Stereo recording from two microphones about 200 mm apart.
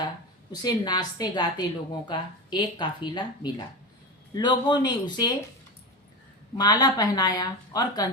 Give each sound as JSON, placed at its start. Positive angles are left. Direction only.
{"t": 0.6, "sound": "a woman's voice", "side_deg": 20}
{"t": 6.6, "sound": "a woman's voice", "side_deg": 20}